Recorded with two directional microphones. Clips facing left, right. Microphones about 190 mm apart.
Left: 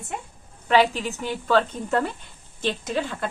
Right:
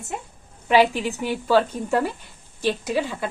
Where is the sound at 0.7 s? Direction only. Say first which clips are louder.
Right 2 dB; 10° right (ahead or behind).